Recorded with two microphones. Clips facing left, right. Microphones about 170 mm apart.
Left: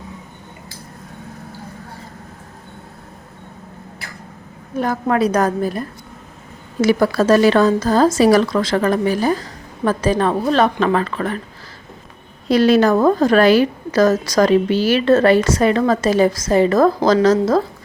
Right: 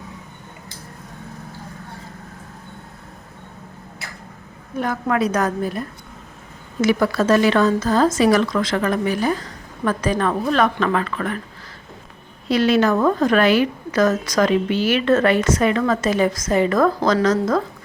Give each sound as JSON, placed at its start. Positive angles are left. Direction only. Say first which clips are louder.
{"t": 4.8, "sound": "a woman's voice", "louder": "left 3 dB", "side_deg": 35}
{"t": 6.8, "sound": "a woman's voice", "louder": "left 3 dB", "side_deg": 35}
{"t": 12.5, "sound": "a woman's voice", "louder": "left 4 dB", "side_deg": 40}